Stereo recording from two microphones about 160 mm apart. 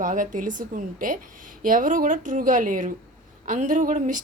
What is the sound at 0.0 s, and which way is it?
A woman's voice, 55° right (ahead or behind).